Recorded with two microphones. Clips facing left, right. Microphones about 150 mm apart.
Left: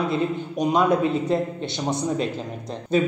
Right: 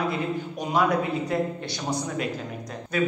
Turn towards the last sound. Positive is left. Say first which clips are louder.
# left 4 dB
turn(degrees=25)  # may be behind; listen again after turning